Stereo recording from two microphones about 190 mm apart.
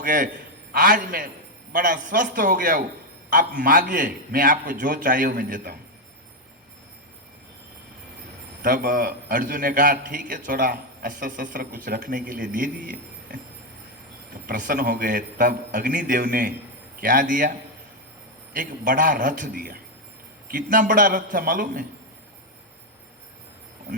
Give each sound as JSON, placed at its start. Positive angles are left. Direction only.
{"t": 0.0, "sound": "a man's voice", "side_deg": -45}
{"t": 8.6, "sound": "a man's voice", "side_deg": -45}
{"t": 14.4, "sound": "a man's voice", "side_deg": -45}
{"t": 18.5, "sound": "a man's voice", "side_deg": -45}